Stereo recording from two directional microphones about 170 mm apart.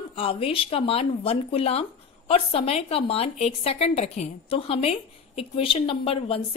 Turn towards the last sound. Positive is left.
turn(degrees=30)  # may be behind; listen again after turning